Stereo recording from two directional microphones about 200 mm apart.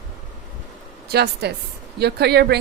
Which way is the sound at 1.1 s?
55° right (ahead or behind).